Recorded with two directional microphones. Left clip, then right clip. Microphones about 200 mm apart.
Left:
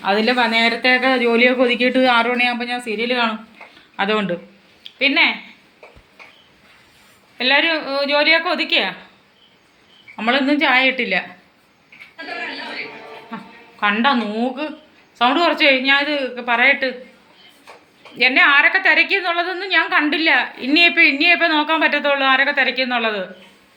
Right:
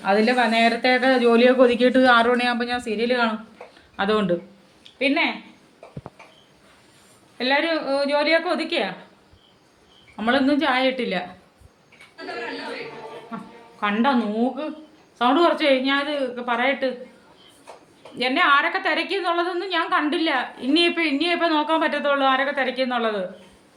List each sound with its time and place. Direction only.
0.0 s speech: 15° right (ahead or behind)
4.8 s a sound: 5° right (ahead or behind)
7.3 s a woman's voice: 15° right (ahead or behind)
10.2 s a woman's voice: 15° right (ahead or behind)
13.3 s a sound: 10° right (ahead or behind)
13.7 s a woman's voice: 5° right (ahead or behind)
18.2 s a woman's voice: 15° right (ahead or behind)